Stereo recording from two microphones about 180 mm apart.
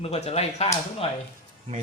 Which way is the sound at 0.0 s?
35° left (ahead or behind).